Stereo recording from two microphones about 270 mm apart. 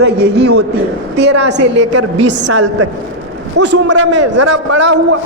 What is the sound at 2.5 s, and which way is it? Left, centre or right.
A man's voice, right.